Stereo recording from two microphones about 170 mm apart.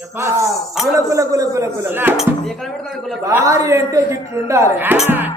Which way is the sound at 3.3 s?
15° right (ahead or behind).